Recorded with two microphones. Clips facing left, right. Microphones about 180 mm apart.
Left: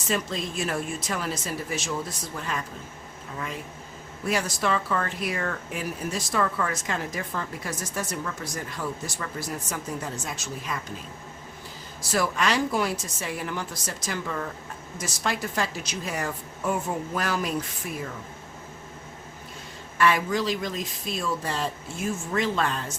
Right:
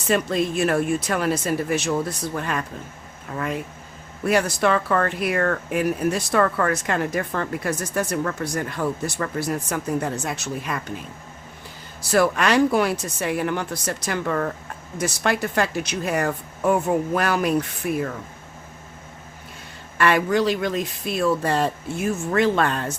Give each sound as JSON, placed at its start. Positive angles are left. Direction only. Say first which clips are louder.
{"t": 0.1, "sound": "speech", "louder": "right 8 dB", "side_deg": -60}
{"t": 12.1, "sound": "speech", "louder": "right 7 dB", "side_deg": -60}
{"t": 20.0, "sound": "speech", "louder": "right 4 dB", "side_deg": -65}